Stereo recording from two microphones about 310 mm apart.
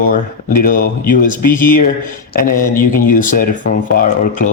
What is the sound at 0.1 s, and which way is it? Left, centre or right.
Speech, left.